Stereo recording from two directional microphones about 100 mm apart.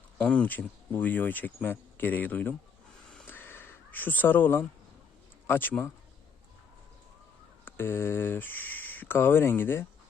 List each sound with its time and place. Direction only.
0.2 s speech: 10° left (ahead or behind)
3.2 s a sound: 20° left (ahead or behind)
5.5 s speech: 20° left (ahead or behind)
7.6 s speech: 25° left (ahead or behind)